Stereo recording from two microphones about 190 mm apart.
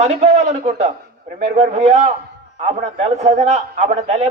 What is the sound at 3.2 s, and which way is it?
Speech, 35° right (ahead or behind).